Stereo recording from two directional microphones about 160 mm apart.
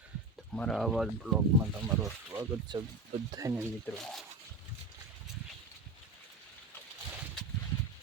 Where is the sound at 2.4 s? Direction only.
25° right (ahead or behind).